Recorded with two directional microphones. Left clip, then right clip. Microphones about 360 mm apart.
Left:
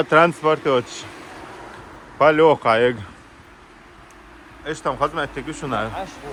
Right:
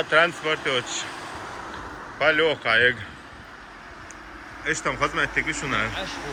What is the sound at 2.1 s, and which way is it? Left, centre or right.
Speech, centre.